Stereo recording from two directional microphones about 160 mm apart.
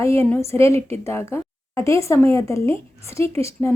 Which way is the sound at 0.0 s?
15° left (ahead or behind).